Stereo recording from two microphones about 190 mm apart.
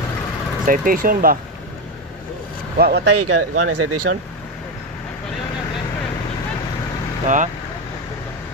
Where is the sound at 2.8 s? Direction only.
60° right (ahead or behind); by 4.2 s 80° right.